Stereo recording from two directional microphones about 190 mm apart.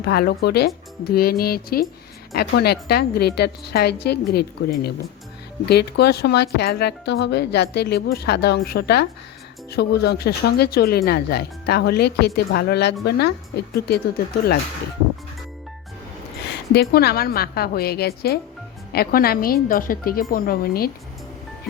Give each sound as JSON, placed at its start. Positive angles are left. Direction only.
{"t": 0.0, "sound": "a woman's voice", "side_deg": 55}
{"t": 16.9, "sound": "a woman's voice", "side_deg": 55}